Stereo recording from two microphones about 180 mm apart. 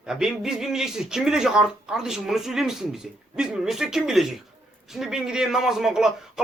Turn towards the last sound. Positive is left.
turn(degrees=0)  # may be behind; listen again after turning